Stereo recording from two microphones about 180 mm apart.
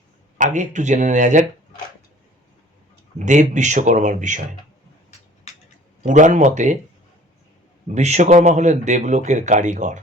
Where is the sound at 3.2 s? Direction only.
45° right (ahead or behind).